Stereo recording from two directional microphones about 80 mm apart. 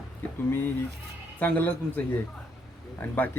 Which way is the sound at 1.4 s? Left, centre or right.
Left.